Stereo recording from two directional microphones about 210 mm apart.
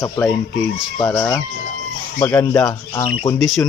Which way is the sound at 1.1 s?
5° left (ahead or behind).